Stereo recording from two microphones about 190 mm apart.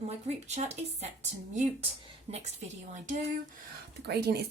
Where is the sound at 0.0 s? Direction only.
35° right (ahead or behind).